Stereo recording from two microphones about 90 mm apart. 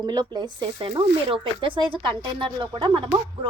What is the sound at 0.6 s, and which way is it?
Speech, 75° right (ahead or behind).